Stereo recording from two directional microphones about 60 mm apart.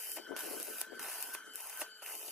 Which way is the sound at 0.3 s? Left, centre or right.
Centre.